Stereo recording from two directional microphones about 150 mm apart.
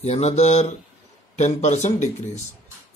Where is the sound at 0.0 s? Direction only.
45° left (ahead or behind).